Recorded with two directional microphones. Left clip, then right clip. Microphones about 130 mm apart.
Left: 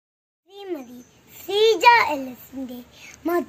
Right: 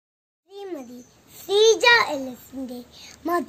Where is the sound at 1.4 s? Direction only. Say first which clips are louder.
Left 1 dB; 20° right (ahead or behind).